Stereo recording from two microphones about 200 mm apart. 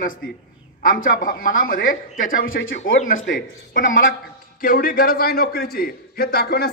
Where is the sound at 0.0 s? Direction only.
45° left (ahead or behind).